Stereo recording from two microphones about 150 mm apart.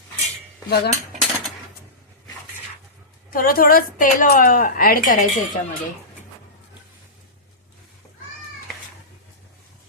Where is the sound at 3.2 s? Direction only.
70° left (ahead or behind).